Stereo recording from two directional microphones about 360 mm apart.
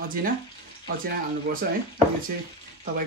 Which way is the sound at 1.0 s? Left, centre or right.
Right.